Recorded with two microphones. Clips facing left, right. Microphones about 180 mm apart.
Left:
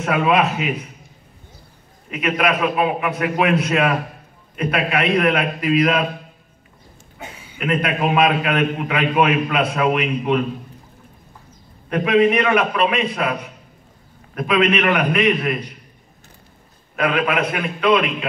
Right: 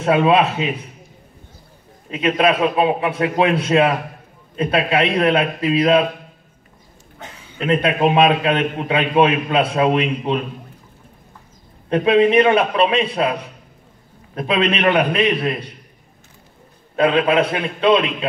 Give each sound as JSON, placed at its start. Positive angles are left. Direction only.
{"t": 0.0, "sound": "a man's voice", "side_deg": -30}
{"t": 2.0, "sound": "a man's voice", "side_deg": -30}
{"t": 7.2, "sound": "a sound", "side_deg": 10}
{"t": 7.5, "sound": "a man's voice", "side_deg": -25}
{"t": 11.9, "sound": "a man's voice", "side_deg": -30}
{"t": 16.9, "sound": "a man's voice", "side_deg": -30}